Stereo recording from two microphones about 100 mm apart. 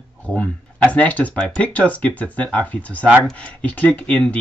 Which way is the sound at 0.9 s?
15° left (ahead or behind).